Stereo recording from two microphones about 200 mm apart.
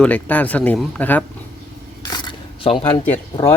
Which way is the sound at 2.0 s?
25° left (ahead or behind).